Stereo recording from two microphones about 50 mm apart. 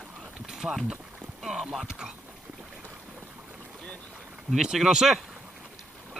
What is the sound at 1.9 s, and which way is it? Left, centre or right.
Speech, centre.